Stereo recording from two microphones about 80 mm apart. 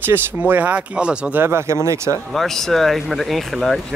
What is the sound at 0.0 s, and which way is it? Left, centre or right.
Speech, right.